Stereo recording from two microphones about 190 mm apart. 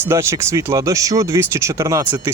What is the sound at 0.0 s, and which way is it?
Speech, 15° right (ahead or behind).